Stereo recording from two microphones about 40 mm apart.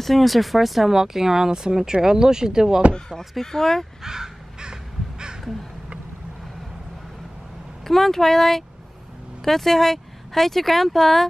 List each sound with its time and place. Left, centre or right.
0.0 s speech: centre
2.9 s speech: centre
3.3 s speech: centre
4.0 s crow: centre
7.8 s speech: centre